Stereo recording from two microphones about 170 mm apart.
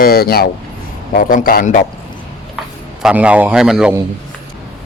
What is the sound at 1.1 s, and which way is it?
Speech, 55° left (ahead or behind).